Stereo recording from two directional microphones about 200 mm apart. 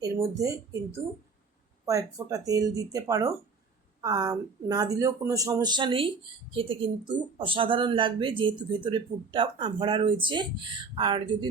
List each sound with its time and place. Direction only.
0.0 s speech: 15° right (ahead or behind)